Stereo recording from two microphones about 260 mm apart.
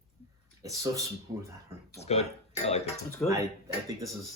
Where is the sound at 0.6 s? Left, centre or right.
Centre.